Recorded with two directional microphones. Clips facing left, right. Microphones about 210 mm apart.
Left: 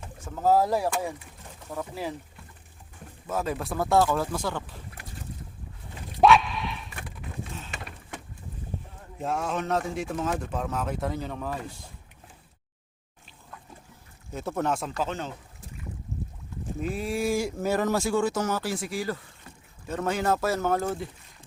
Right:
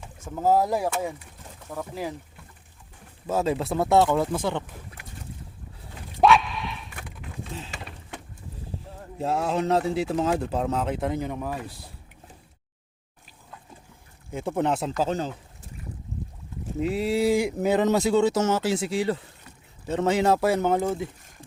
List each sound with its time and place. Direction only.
0.3 s speech: 15° right (ahead or behind)
3.2 s speech: 25° right (ahead or behind)
6.1 s a sound: centre (ahead or behind)
9.1 s a man's voice: 30° right (ahead or behind); by 11.7 s 10° right (ahead or behind)
14.3 s speech: 15° right (ahead or behind)
14.9 s a man's voice: 35° right (ahead or behind)
17.1 s speech: 20° right (ahead or behind)